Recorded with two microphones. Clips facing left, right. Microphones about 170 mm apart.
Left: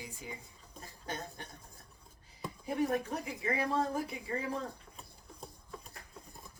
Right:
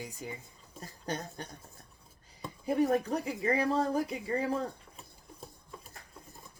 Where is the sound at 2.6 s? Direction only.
40° right (ahead or behind).